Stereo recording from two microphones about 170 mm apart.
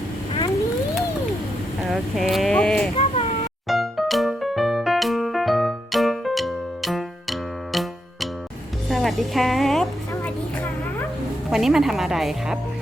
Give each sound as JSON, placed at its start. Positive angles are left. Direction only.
{"t": 1.9, "sound": "sheep", "side_deg": 0}
{"t": 2.9, "sound": "a sound", "side_deg": 35}
{"t": 3.7, "sound": "music", "side_deg": 0}
{"t": 11.5, "sound": "speech", "side_deg": 0}